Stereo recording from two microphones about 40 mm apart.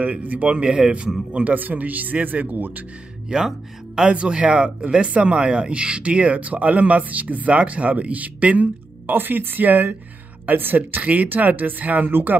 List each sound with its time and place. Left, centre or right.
0.0 s speech: right
0.5 s speech: right
1.5 s speech: right
3.3 s speech: centre
4.1 s speech: right
9.1 s speech: right